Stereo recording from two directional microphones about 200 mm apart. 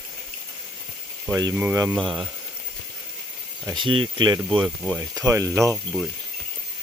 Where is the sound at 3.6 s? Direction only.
25° right (ahead or behind).